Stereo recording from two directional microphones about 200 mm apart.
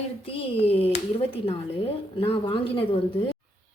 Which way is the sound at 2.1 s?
25° left (ahead or behind).